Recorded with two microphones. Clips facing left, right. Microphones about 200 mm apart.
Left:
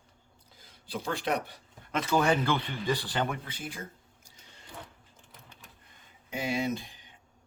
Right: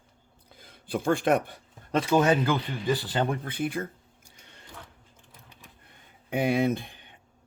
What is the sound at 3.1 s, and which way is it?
Speech, 30° right (ahead or behind).